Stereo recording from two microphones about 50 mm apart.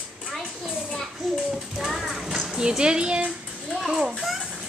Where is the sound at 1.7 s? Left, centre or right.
Centre.